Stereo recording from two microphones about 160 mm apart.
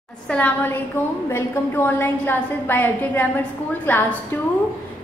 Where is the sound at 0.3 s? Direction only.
10° left (ahead or behind).